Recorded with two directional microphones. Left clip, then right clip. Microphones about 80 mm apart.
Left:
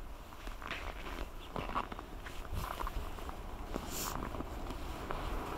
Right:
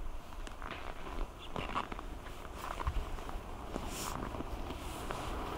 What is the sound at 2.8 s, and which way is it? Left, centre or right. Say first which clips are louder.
Walk: even; centre.